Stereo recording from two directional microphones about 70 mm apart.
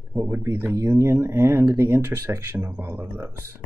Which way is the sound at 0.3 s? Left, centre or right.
Right.